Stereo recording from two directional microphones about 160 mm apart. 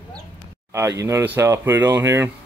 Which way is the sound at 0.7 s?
20° right (ahead or behind).